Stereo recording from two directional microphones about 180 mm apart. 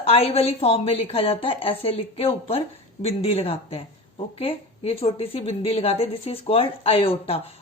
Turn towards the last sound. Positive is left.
turn(degrees=35)  # may be behind; listen again after turning